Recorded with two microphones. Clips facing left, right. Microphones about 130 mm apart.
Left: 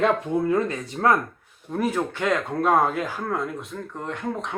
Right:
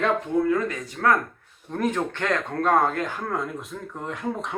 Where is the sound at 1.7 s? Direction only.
5° left (ahead or behind).